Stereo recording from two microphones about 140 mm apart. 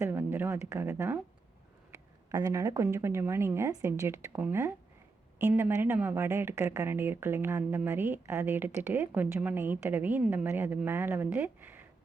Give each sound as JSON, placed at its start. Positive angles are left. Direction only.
{"t": 0.0, "sound": "speech", "side_deg": -15}